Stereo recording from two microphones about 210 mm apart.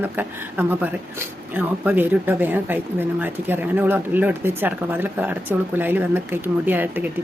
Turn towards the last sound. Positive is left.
turn(degrees=-10)  # may be behind; listen again after turning